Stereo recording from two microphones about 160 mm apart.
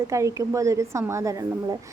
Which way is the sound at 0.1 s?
20° right (ahead or behind).